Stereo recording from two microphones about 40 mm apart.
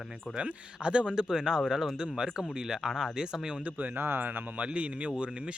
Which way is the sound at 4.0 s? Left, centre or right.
Right.